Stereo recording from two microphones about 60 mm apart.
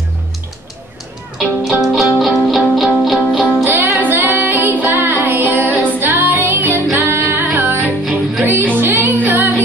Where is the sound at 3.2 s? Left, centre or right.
Centre.